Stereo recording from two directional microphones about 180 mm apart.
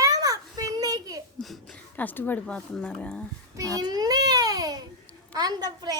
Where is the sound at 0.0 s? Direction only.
20° right (ahead or behind).